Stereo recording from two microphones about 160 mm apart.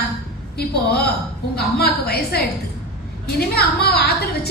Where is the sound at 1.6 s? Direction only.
80° left.